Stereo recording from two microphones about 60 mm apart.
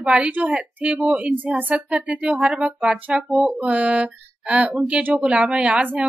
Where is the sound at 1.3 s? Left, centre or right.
Right.